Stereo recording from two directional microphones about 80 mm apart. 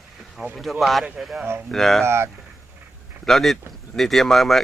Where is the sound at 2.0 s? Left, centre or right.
Right.